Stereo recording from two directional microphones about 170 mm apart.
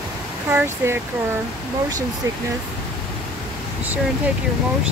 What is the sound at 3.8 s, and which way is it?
Speech, 10° right (ahead or behind).